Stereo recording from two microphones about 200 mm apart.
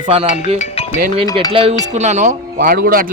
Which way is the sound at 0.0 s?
30° right (ahead or behind).